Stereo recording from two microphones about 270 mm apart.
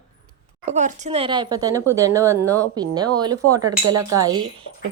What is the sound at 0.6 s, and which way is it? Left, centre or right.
Speech, right.